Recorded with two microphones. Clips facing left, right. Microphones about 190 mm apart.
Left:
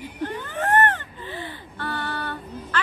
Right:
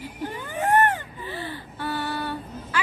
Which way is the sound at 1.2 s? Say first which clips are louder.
Right 1 dB; 15° left (ahead or behind).